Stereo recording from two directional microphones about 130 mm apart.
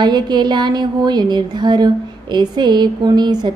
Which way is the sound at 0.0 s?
35° right (ahead or behind).